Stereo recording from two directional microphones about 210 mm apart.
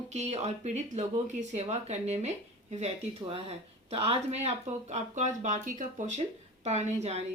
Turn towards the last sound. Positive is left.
turn(degrees=-30)  # may be behind; listen again after turning